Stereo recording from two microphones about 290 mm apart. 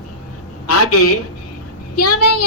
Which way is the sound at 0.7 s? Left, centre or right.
Left.